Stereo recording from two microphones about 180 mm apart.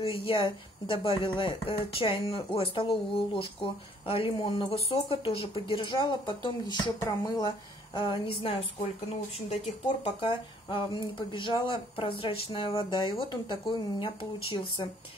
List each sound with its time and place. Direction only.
0.2 s speech: 30° left (ahead or behind)
10.0 s speech: 25° left (ahead or behind)